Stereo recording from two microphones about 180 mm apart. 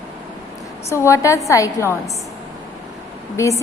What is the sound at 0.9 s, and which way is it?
A woman's voice, 15° left (ahead or behind).